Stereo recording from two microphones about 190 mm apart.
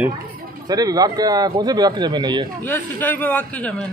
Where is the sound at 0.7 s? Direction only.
20° right (ahead or behind).